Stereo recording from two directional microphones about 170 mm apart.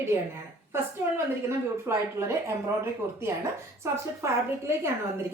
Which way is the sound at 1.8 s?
15° right (ahead or behind).